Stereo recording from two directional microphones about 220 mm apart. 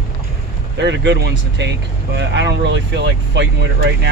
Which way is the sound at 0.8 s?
50° right (ahead or behind).